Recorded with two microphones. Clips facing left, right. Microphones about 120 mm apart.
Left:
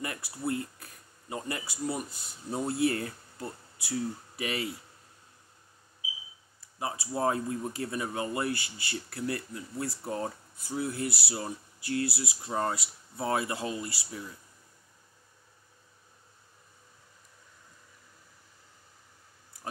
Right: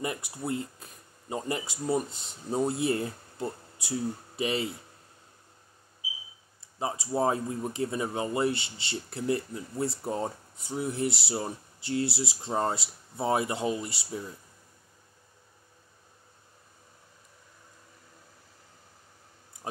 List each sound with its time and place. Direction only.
0.0 s speech: 20° right (ahead or behind)
6.8 s speech: 20° right (ahead or behind)